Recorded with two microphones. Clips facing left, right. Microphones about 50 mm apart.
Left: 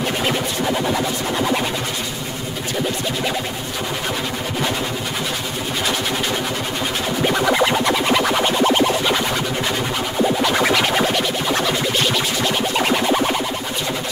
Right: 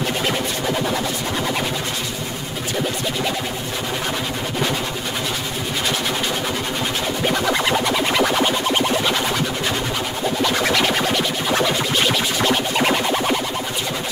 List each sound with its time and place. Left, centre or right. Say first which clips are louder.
0.7 s music: left 2 dB; centre
7.2 s music: left 3 dB; centre
10.4 s music: right 2 dB; centre
12.7 s music: left 1 dB; centre